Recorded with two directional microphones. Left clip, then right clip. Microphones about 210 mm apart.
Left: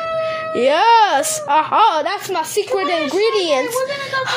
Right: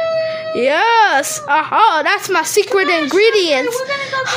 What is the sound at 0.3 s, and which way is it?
A woman's voice, 5° right (ahead or behind).